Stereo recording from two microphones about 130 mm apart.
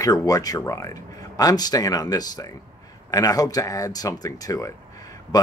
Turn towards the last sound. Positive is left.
turn(degrees=25)  # may be behind; listen again after turning